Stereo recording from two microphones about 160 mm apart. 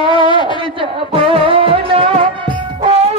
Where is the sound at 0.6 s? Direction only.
35° right (ahead or behind).